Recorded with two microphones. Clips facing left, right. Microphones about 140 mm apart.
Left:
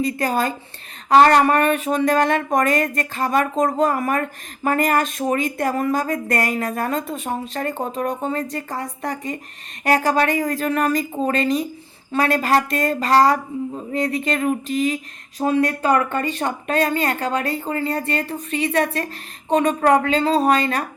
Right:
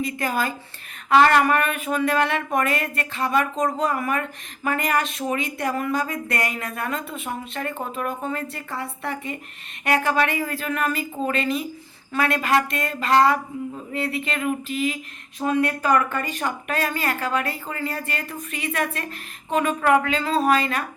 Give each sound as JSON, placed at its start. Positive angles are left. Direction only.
{"t": 0.0, "sound": "speech", "side_deg": 35}